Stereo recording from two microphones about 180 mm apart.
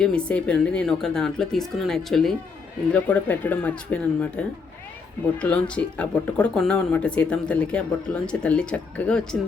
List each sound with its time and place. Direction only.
0.0 s speech: 5° left (ahead or behind)
5.4 s speech: 5° left (ahead or behind)